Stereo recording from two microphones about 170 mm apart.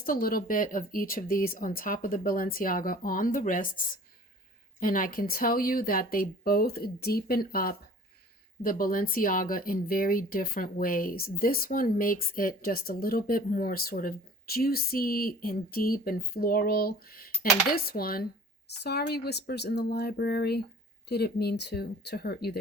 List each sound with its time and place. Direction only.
0.0 s speech: 55° left (ahead or behind)
18.8 s speech: 75° left (ahead or behind)